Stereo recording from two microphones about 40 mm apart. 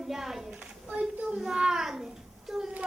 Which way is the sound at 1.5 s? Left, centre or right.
Centre.